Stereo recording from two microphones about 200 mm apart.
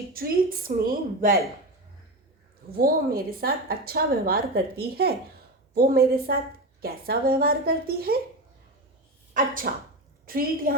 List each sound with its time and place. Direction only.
0.1 s a woman's voice: 45° right (ahead or behind)
2.7 s a woman's voice: 50° right (ahead or behind)
9.3 s a woman's voice: 45° right (ahead or behind)